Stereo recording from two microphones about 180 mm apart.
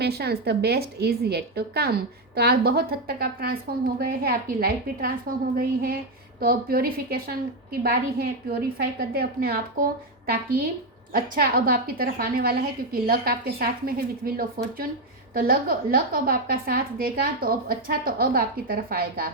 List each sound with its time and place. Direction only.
0.0 s a woman's voice: 65° right (ahead or behind)